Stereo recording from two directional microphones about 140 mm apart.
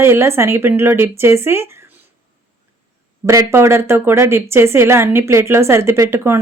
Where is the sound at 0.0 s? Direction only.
20° right (ahead or behind).